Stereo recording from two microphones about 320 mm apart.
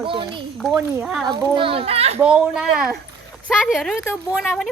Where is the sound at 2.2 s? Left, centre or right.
Centre.